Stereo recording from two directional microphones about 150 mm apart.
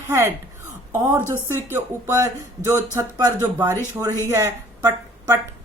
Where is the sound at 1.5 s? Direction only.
15° right (ahead or behind).